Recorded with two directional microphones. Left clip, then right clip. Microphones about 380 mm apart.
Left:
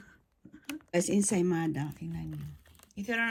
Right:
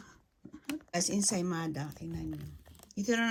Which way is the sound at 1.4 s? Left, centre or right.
Left.